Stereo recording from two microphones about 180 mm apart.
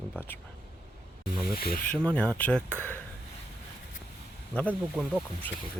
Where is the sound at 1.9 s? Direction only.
5° left (ahead or behind).